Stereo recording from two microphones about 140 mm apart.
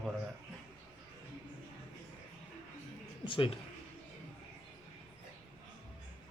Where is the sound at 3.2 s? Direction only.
40° left (ahead or behind).